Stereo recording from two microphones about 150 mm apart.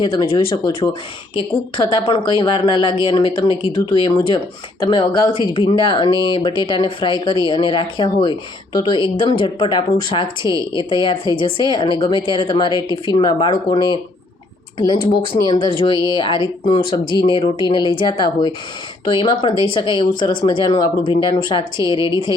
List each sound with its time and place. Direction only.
0.0 s speech: 35° left (ahead or behind)
15.0 s speech: 35° left (ahead or behind)